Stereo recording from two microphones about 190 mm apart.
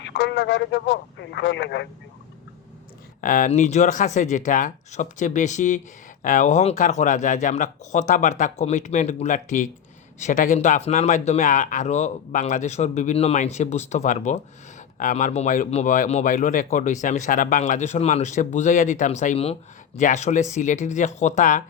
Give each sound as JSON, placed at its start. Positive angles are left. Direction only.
{"t": 0.0, "sound": "speech", "side_deg": 65}
{"t": 3.2, "sound": "speech", "side_deg": 45}